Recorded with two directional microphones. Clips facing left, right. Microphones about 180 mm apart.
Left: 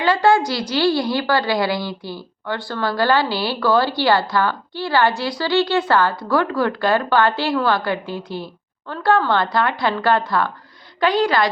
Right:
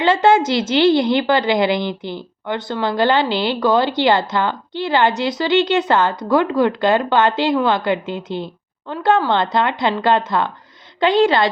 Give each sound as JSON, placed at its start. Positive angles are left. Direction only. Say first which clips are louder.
{"t": 0.0, "sound": "a woman's voice", "louder": "right 2 dB", "side_deg": -25}